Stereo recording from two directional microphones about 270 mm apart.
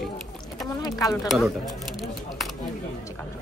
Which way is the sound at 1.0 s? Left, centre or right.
Centre.